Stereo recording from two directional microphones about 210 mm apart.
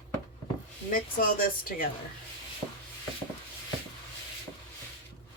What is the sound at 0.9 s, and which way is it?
Speech, 45° left (ahead or behind).